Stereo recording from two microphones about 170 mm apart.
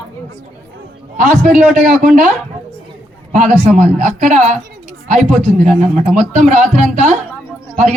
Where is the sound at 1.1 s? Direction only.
45° right (ahead or behind).